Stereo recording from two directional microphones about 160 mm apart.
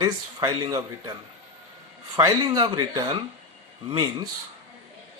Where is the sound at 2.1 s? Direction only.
25° right (ahead or behind).